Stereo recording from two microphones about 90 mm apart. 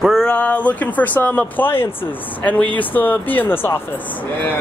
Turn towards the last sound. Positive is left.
turn(degrees=25)  # may be behind; listen again after turning